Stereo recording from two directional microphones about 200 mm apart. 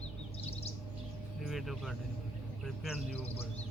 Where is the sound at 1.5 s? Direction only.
Centre (ahead or behind).